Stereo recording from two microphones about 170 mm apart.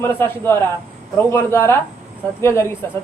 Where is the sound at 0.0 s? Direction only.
15° left (ahead or behind).